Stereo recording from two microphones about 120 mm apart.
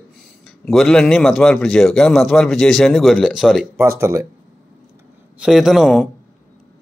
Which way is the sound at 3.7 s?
25° right (ahead or behind).